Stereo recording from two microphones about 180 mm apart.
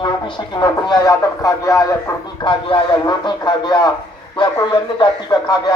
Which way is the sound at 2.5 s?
30° left (ahead or behind).